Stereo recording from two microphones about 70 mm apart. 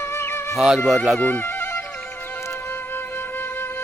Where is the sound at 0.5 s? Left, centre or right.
Centre.